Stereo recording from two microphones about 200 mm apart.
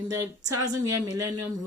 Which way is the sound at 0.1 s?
15° right (ahead or behind).